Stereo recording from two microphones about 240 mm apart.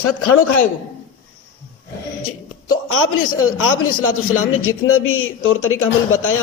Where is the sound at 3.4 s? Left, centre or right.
Left.